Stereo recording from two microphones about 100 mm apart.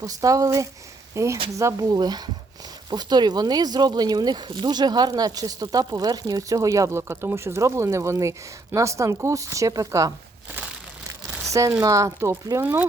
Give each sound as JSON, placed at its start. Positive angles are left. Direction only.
{"t": 0.0, "sound": "speech", "side_deg": -35}
{"t": 11.8, "sound": "speech", "side_deg": -35}